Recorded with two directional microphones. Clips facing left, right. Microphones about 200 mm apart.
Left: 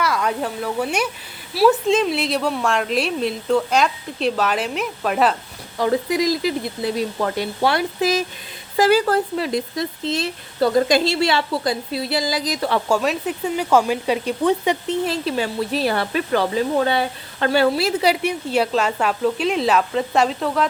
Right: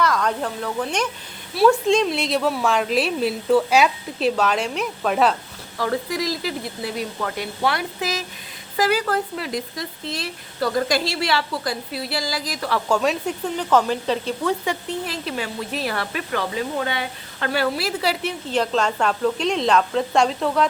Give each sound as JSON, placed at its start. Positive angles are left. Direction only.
{"t": 0.0, "sound": "a woman's voice", "side_deg": 10}
{"t": 5.7, "sound": "speech", "side_deg": 20}
{"t": 12.9, "sound": "a woman's voice", "side_deg": 5}